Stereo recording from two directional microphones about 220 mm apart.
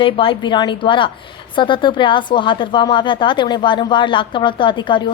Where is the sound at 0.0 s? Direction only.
25° left (ahead or behind).